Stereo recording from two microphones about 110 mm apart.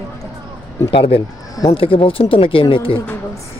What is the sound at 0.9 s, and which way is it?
Speech, 60° left (ahead or behind).